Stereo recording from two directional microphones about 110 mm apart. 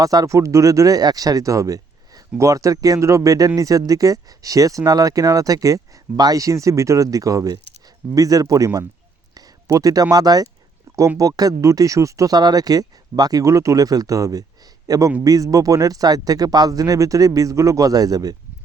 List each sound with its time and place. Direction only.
0.0 s speech: 35° right (ahead or behind)
10.9 s a sound: 25° right (ahead or behind)
11.2 s a man's voice: 35° right (ahead or behind)